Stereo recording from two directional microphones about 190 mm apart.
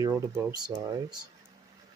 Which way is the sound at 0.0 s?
20° right (ahead or behind).